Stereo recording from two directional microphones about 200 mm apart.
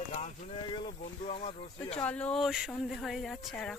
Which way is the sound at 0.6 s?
25° left (ahead or behind).